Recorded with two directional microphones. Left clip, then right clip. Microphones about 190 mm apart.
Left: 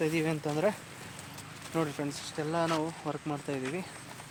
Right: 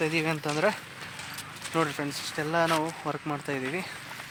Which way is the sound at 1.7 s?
25° right (ahead or behind).